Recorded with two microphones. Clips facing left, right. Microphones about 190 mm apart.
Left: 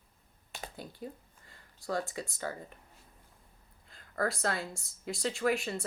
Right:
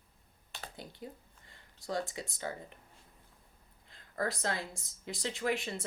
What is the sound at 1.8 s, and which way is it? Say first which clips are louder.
Speech: left 2 dB; 20° right (ahead or behind).